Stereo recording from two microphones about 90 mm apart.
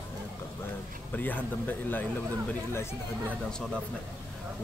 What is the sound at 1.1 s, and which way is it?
Speech, 20° left (ahead or behind).